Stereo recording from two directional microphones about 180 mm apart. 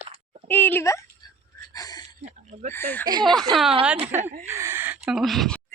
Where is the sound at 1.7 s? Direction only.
20° left (ahead or behind).